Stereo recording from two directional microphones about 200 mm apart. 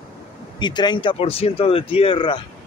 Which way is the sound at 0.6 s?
20° left (ahead or behind).